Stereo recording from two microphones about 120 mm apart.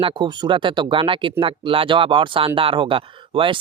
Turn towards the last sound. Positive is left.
turn(degrees=-45)  # may be behind; listen again after turning